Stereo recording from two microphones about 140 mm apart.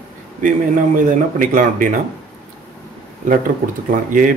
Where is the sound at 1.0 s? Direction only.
75° right (ahead or behind).